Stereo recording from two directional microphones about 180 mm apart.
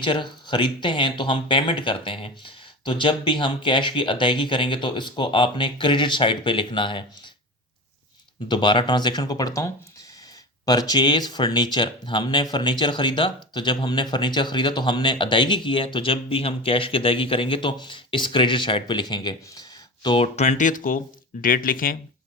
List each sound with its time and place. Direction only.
0.0 s speech: 25° left (ahead or behind)
8.4 s speech: 25° left (ahead or behind); by 21.9 s 50° left (ahead or behind)